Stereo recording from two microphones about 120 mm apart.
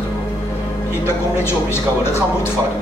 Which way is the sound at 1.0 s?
20° left (ahead or behind).